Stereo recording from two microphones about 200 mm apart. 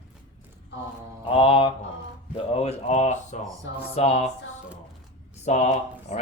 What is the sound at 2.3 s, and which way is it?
Speech, 30° left (ahead or behind).